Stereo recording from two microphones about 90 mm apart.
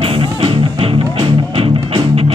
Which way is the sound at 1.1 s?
55° right (ahead or behind).